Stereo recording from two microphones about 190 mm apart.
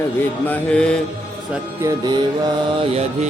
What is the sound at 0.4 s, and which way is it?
Mantra, 5° left (ahead or behind).